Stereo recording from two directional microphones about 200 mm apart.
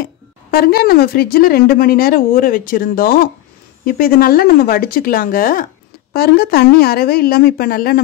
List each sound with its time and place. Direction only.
0.0 s speech: 50° left (ahead or behind)